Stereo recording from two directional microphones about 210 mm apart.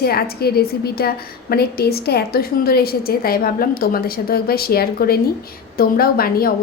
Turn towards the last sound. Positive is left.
turn(degrees=45)  # may be behind; listen again after turning